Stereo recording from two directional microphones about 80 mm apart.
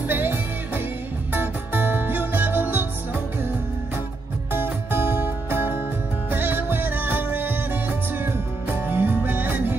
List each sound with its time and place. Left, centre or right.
0.1 s music: right
4.5 s music: right